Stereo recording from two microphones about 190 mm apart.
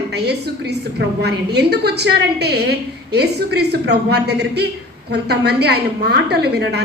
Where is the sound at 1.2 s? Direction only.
60° right (ahead or behind).